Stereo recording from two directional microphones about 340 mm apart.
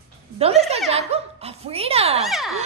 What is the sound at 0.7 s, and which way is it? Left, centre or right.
Speech, centre.